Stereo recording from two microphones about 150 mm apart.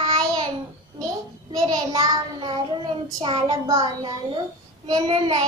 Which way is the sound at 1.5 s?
25° right (ahead or behind).